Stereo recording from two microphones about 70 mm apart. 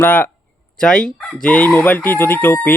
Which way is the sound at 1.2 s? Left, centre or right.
Centre.